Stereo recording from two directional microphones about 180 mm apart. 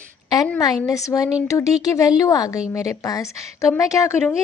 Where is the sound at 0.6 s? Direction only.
20° left (ahead or behind).